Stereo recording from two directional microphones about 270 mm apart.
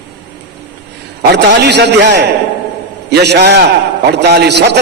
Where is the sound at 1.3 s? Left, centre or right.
Right.